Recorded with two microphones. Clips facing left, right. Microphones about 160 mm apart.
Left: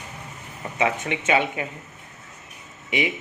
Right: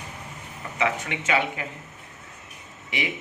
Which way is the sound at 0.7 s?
25° left (ahead or behind).